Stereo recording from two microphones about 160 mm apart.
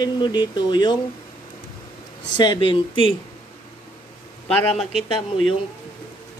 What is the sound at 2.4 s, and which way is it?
Speech, 30° left (ahead or behind).